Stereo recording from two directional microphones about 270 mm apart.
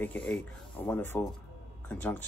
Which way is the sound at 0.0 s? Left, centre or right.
Centre.